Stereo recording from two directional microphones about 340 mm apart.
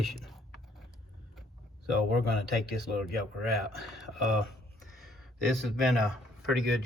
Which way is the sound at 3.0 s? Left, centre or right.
Centre.